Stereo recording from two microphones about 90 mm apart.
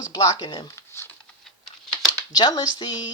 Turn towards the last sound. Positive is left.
turn(degrees=55)  # may be behind; listen again after turning